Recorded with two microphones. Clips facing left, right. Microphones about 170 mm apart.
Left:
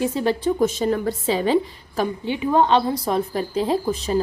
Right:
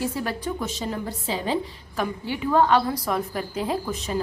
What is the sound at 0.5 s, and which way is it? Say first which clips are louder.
Speech: left 10 dB; 50° left (ahead or behind).